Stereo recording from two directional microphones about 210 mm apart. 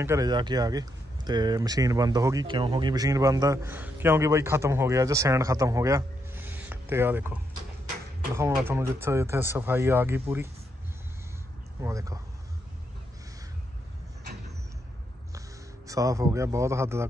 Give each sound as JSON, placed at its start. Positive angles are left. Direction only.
{"t": 0.0, "sound": "speech", "side_deg": -15}
{"t": 8.6, "sound": "speech", "side_deg": -10}
{"t": 11.8, "sound": "speech", "side_deg": -15}
{"t": 15.9, "sound": "speech", "side_deg": -15}